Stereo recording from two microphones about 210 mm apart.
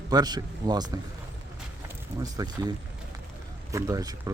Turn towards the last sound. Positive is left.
turn(degrees=-15)  # may be behind; listen again after turning